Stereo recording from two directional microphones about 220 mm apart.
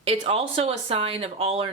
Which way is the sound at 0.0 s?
25° right (ahead or behind).